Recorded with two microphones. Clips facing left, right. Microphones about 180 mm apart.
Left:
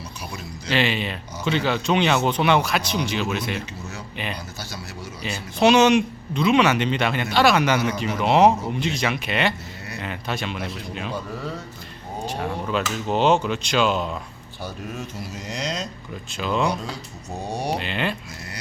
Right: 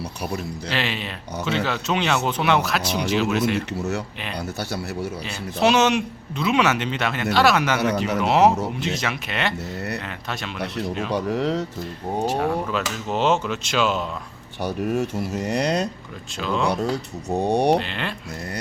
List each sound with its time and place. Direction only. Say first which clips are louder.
0.7 s speech: left 5 dB; centre (ahead or behind)
3.8 s speech: right 10 dB; 75° right (ahead or behind)
5.5 s speech: left 3 dB; centre (ahead or behind)
11.1 s speech: right 10 dB; 90° right
12.7 s speech: left 2 dB; centre (ahead or behind)
14.8 s speech: right 13 dB; 65° right (ahead or behind)
16.4 s speech: left 1 dB; 5° left (ahead or behind)
16.6 s speech: right 4 dB; 65° right (ahead or behind)
17.7 s speech: even; 5° left (ahead or behind)